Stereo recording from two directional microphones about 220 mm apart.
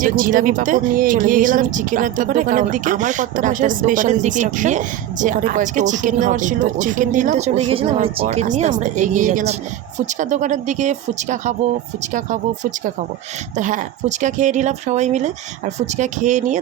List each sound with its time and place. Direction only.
0.0 s speech: 40° right (ahead or behind)
13.6 s speech: 35° right (ahead or behind)